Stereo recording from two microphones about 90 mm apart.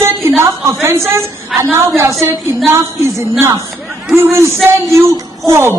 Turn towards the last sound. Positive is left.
turn(degrees=-30)  # may be behind; listen again after turning